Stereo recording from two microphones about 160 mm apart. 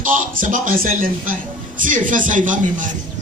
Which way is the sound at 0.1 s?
55° right (ahead or behind).